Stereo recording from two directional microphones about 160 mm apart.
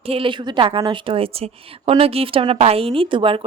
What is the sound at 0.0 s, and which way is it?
A woman's voice, 35° right (ahead or behind).